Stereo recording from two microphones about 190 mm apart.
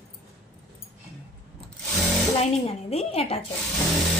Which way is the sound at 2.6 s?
30° left (ahead or behind).